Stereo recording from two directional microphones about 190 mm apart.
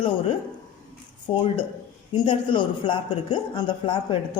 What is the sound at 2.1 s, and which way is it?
Speech, 25° left (ahead or behind).